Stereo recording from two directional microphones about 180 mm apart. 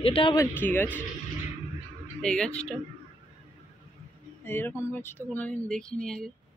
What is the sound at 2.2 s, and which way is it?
Speech, 5° left (ahead or behind).